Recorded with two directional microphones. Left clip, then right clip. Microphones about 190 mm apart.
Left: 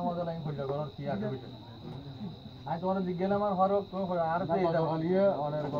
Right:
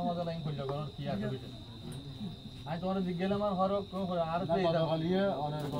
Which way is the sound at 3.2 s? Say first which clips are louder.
Left 4 dB; 45° right (ahead or behind).